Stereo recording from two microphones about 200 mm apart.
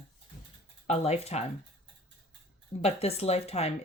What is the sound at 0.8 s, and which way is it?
Speech, 35° left (ahead or behind).